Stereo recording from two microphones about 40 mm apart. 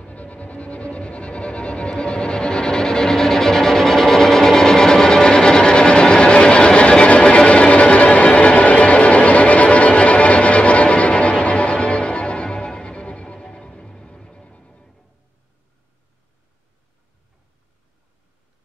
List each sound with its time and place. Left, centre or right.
0.0 s music: left